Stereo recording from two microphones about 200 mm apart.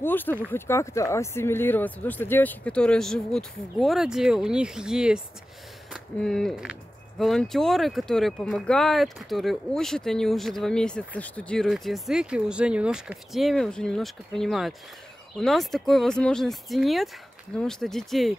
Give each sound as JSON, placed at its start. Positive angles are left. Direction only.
{"t": 0.0, "sound": "speech", "side_deg": 10}